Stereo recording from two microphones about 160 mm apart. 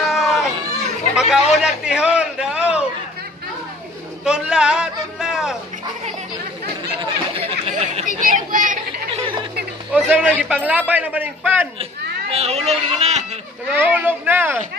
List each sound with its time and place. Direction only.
0.0 s a sound: centre (ahead or behind)
1.1 s a man's voice: 5° right (ahead or behind)
4.2 s a sound: 5° right (ahead or behind)
7.0 s chatter: 35° right (ahead or behind); by 8.7 s 55° right (ahead or behind)
9.9 s a man's voice: 10° right (ahead or behind)
11.8 s speech: 40° right (ahead or behind)
13.7 s a man's voice: 10° right (ahead or behind)